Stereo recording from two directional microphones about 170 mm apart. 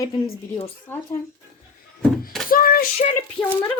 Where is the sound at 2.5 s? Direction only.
60° left (ahead or behind).